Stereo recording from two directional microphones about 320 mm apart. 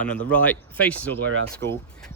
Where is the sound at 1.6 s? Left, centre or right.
Right.